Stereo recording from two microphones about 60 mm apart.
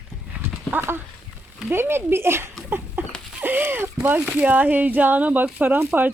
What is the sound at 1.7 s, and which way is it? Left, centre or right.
Speech, right.